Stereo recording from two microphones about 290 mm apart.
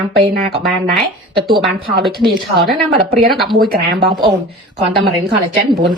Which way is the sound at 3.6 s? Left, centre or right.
Right.